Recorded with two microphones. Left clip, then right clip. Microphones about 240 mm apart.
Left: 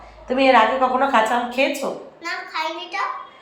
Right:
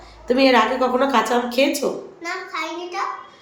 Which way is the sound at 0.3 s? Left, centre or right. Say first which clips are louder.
Left 2 dB; centre.